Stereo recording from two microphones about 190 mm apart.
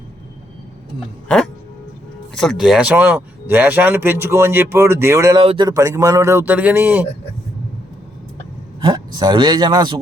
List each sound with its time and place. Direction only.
2.3 s speech: centre (ahead or behind)
8.8 s a man's voice: 20° right (ahead or behind)